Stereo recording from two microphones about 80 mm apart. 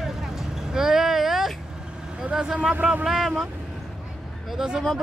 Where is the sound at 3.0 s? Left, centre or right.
Centre.